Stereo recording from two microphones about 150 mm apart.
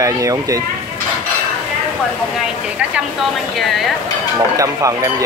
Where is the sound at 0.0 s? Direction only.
20° right (ahead or behind).